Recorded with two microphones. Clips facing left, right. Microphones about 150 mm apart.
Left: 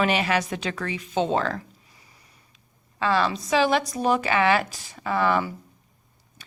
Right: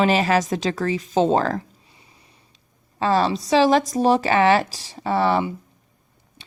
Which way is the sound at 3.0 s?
35° right (ahead or behind).